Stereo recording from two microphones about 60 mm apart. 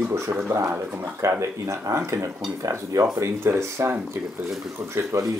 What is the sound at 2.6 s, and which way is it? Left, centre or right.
Speech, right.